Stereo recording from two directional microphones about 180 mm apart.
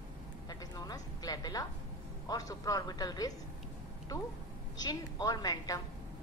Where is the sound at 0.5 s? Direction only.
20° left (ahead or behind).